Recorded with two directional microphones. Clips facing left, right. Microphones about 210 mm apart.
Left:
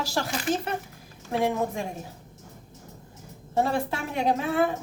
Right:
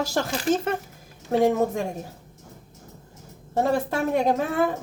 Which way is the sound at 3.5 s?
45° right (ahead or behind).